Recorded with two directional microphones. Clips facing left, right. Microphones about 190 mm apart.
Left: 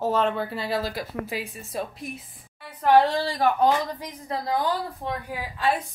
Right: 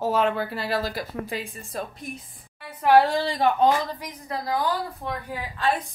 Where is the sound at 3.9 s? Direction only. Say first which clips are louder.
Left 1 dB; 25° left (ahead or behind).